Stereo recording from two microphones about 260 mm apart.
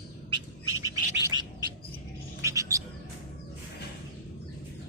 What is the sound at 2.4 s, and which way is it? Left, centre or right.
Bird, centre.